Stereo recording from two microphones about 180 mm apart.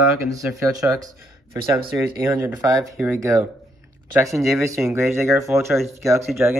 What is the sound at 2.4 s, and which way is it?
Speech, 15° right (ahead or behind).